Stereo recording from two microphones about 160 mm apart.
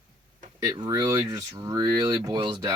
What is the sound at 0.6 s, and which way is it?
Speech, 25° right (ahead or behind).